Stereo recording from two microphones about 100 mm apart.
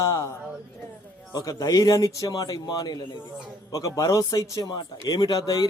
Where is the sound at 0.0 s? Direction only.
30° left (ahead or behind).